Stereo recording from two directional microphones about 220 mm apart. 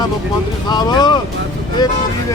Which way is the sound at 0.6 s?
20° left (ahead or behind).